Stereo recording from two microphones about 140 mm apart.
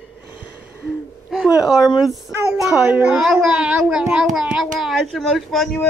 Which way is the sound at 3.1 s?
Centre (ahead or behind).